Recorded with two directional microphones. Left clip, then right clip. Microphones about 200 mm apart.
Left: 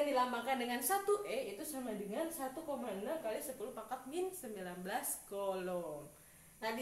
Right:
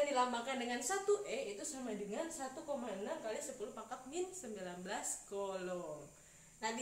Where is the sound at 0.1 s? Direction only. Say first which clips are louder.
Left 1 dB; 10° left (ahead or behind).